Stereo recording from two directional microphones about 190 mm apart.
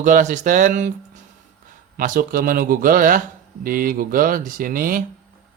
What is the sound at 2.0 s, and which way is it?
Speech, 50° right (ahead or behind).